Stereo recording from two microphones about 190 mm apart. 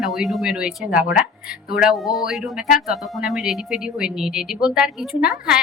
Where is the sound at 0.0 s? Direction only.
Centre (ahead or behind).